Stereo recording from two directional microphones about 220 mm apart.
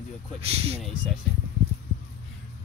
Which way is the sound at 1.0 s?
20° right (ahead or behind).